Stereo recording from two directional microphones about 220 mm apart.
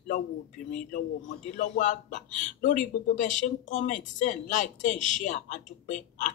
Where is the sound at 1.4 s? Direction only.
35° left (ahead or behind).